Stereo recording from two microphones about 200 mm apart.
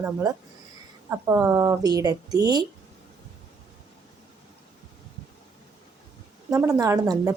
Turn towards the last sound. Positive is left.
turn(degrees=-15)  # may be behind; listen again after turning